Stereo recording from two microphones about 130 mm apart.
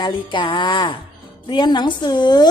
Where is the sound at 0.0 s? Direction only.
35° left (ahead or behind).